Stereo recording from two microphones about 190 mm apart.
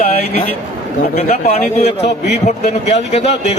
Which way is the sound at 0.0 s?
35° left (ahead or behind).